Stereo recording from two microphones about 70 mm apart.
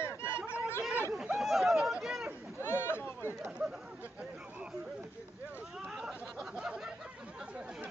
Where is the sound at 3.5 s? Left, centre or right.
Centre.